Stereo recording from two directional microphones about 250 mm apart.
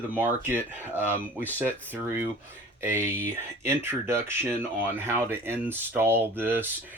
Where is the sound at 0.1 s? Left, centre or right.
Centre.